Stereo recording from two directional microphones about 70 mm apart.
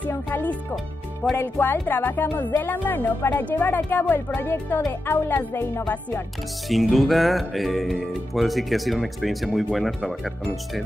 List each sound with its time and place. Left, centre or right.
0.1 s speech: left
5.5 s speech: left
6.7 s speech: centre